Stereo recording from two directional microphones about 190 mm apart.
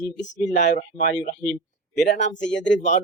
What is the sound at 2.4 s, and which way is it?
Speech, 70° left (ahead or behind).